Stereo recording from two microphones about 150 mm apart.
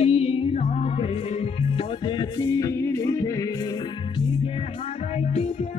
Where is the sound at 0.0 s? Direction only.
40° left (ahead or behind).